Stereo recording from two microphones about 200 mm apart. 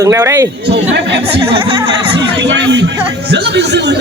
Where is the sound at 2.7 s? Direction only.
60° right (ahead or behind).